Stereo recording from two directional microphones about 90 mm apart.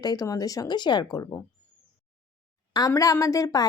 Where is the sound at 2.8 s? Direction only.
40° left (ahead or behind).